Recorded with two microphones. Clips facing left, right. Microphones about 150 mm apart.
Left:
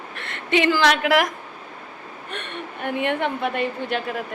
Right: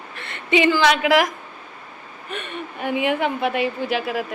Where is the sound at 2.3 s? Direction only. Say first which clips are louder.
Right 3 dB; 5° right (ahead or behind).